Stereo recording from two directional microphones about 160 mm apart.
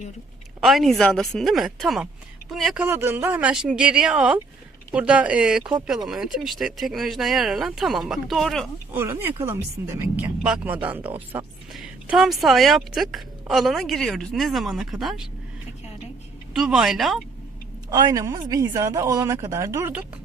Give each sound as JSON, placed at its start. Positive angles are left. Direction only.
{"t": 0.6, "sound": "a woman's voice", "side_deg": 0}
{"t": 2.8, "sound": "a woman's voice", "side_deg": -15}
{"t": 8.9, "sound": "a woman's voice", "side_deg": -15}
{"t": 16.6, "sound": "a woman's voice", "side_deg": 0}
{"t": 17.9, "sound": "speech", "side_deg": -20}